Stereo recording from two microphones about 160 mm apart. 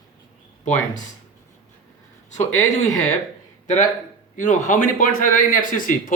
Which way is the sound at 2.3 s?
45° left (ahead or behind).